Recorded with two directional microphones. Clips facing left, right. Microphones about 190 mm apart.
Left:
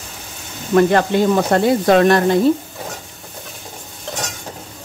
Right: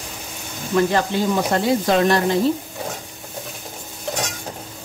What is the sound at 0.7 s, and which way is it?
Speech, 60° left (ahead or behind).